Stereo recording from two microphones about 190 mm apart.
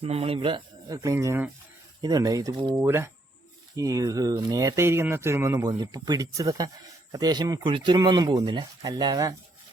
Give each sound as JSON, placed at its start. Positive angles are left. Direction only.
{"t": 0.0, "sound": "speech", "side_deg": -30}